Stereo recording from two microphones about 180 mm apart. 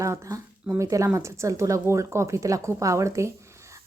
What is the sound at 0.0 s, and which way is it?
A woman's voice, 15° right (ahead or behind).